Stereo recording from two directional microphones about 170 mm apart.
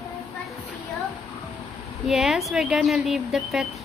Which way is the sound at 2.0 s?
Centre (ahead or behind).